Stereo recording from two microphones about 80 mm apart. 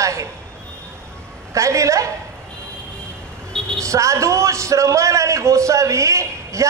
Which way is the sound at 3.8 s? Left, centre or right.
Right.